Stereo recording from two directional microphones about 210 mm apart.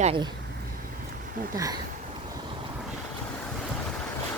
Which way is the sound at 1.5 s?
15° right (ahead or behind).